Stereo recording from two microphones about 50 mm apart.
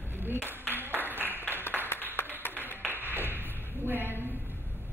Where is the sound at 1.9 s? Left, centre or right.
Left.